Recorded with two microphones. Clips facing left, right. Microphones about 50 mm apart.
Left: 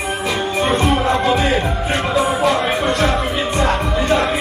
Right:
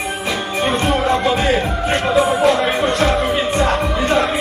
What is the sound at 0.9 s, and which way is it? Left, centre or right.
Music, centre.